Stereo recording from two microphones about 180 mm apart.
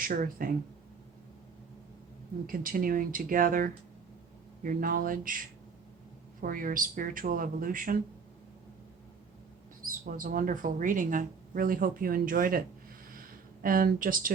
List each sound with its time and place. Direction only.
0.0 s speech: 50° right (ahead or behind)
2.5 s speech: 50° right (ahead or behind)
6.4 s speech: 50° right (ahead or behind)
9.8 s a sound: 50° right (ahead or behind)
10.2 s speech: 50° right (ahead or behind)
13.1 s a sound: 50° right (ahead or behind)